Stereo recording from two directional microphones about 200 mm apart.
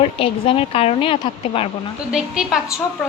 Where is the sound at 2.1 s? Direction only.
Centre (ahead or behind).